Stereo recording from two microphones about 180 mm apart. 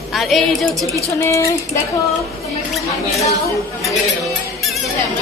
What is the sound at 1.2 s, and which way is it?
Speech, 15° left (ahead or behind).